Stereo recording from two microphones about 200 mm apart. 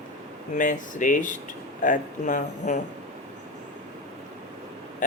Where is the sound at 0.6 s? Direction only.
40° left (ahead or behind).